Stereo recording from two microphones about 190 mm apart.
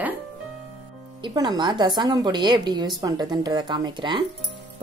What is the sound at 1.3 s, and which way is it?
Speech, 20° right (ahead or behind).